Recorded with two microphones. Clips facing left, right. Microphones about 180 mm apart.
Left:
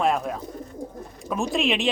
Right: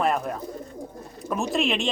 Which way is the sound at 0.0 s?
Centre (ahead or behind).